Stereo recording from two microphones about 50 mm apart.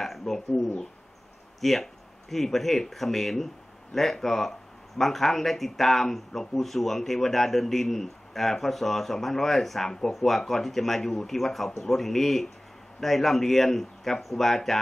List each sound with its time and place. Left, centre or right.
0.0 s speech: centre